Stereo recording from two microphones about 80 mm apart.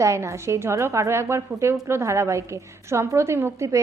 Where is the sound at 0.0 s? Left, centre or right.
Right.